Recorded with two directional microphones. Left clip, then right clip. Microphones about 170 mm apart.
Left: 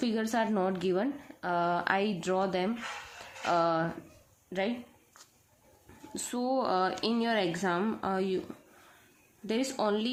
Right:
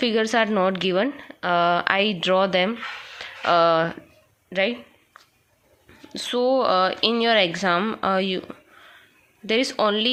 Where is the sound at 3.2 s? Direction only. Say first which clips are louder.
Right 10 dB; 20° right (ahead or behind).